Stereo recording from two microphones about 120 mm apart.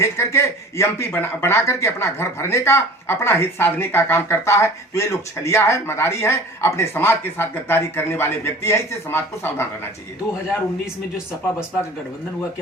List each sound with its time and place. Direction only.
0.0 s speech: 25° left (ahead or behind)